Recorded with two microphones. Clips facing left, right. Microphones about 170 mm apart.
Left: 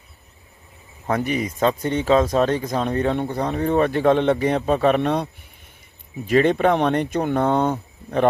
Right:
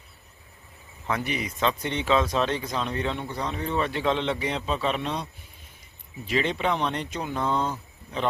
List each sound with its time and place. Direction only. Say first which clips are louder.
1.0 s speech: left 7 dB; 45° left (ahead or behind)